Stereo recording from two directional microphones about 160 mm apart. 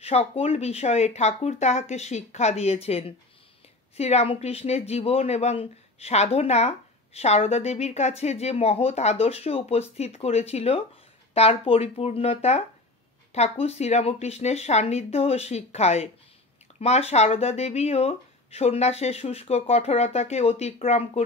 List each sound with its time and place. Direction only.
0.0 s speech: 40° left (ahead or behind)